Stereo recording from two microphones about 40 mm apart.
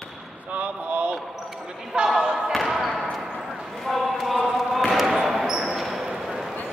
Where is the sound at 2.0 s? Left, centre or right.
Centre.